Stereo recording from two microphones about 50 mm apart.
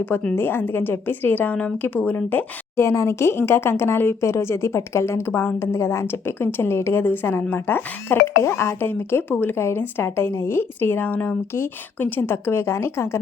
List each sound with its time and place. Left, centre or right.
0.3 s a woman's voice: left
2.7 s speech: left
6.2 s a woman's voice: left
7.0 s a woman's voice: left
8.4 s speech: left
8.9 s a woman's voice: left
9.6 s a woman's voice: left